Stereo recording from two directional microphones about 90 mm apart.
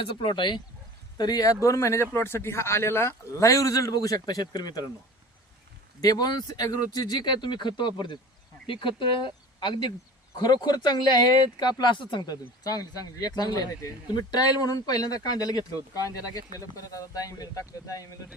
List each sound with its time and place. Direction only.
0.0 s speech: 65° left (ahead or behind)
1.2 s speech: 50° left (ahead or behind)
1.6 s speech: 35° left (ahead or behind)
6.0 s speech: 45° left (ahead or behind)
8.6 s speech: 70° left (ahead or behind); by 18.1 s 40° left (ahead or behind)